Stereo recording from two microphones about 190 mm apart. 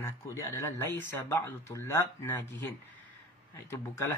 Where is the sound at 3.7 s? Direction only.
15° left (ahead or behind).